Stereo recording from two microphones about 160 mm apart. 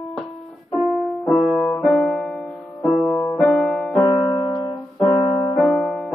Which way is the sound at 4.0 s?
20° left (ahead or behind).